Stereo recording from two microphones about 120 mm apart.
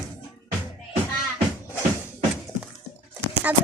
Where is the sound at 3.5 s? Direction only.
15° right (ahead or behind).